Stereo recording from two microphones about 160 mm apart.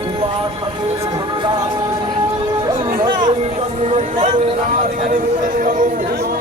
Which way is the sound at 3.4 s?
40° right (ahead or behind).